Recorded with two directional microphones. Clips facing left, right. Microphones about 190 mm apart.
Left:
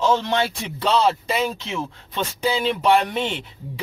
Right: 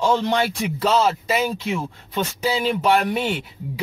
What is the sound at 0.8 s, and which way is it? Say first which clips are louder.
A man's voice: even; centre (ahead or behind).